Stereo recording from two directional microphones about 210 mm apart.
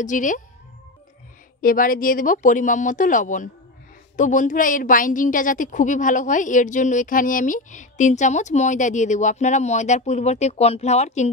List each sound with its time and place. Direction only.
0.0 s a woman's voice: 40° left (ahead or behind)
1.6 s a woman's voice: 40° left (ahead or behind)